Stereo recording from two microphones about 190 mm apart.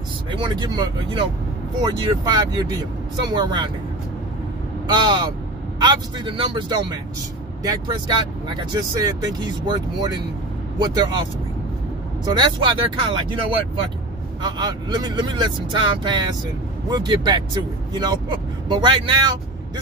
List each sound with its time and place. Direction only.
0.3 s speech: 25° right (ahead or behind)
4.8 s speech: 25° right (ahead or behind)
12.3 s speech: 25° right (ahead or behind)
14.4 s speech: 20° right (ahead or behind)